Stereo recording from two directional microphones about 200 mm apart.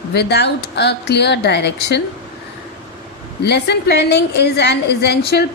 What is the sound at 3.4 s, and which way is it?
A woman's voice, 55° left (ahead or behind).